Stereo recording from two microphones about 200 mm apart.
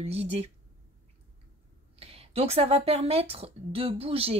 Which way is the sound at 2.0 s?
30° right (ahead or behind).